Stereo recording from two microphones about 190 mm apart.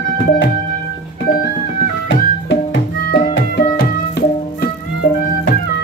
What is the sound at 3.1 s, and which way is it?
Music, 60° left (ahead or behind).